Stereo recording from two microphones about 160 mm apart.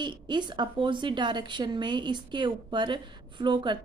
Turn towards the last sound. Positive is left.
turn(degrees=-30)  # may be behind; listen again after turning